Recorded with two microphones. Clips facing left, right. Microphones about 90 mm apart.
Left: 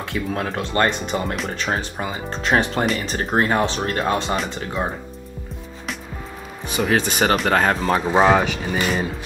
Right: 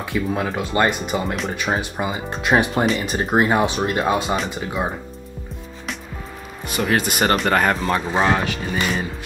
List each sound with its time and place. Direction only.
0.1 s speech: 5° right (ahead or behind)
1.5 s speech: 10° right (ahead or behind)
7.0 s speech: 10° right (ahead or behind)
7.2 s speech: centre (ahead or behind)
8.0 s speech: 15° left (ahead or behind)